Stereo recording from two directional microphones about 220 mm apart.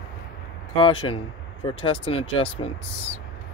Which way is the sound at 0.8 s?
25° left (ahead or behind).